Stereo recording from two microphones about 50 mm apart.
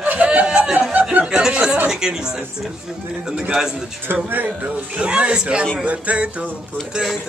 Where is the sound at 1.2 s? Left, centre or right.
Centre.